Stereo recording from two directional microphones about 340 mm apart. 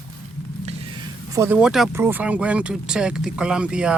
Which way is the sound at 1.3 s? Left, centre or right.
Centre.